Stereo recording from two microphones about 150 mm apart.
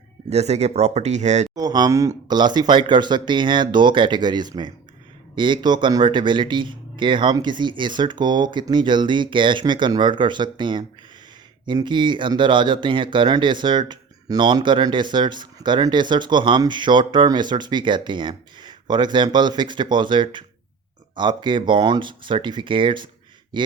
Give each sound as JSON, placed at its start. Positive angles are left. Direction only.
{"t": 0.3, "sound": "speech", "side_deg": -45}
{"t": 1.5, "sound": "speech", "side_deg": -25}